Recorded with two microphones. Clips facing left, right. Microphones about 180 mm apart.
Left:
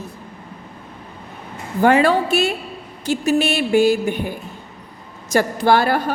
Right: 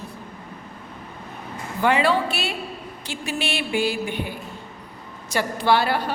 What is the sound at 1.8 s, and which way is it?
A woman's voice, 45° left (ahead or behind).